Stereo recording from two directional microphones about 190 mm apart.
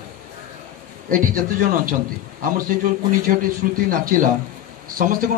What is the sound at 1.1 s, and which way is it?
Speech, 45° right (ahead or behind).